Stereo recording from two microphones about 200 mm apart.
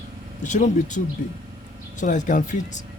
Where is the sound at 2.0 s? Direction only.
40° left (ahead or behind).